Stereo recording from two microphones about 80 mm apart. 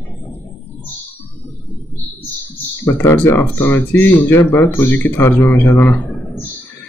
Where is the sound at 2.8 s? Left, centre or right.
Left.